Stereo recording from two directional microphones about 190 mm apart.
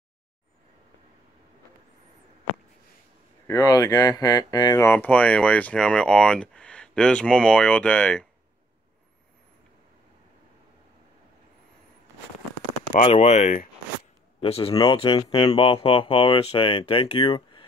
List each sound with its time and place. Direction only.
3.4 s speech: 15° left (ahead or behind)
12.9 s speech: 35° left (ahead or behind)